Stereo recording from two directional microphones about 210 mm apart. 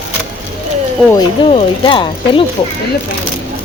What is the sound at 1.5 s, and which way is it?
Speech, 25° left (ahead or behind).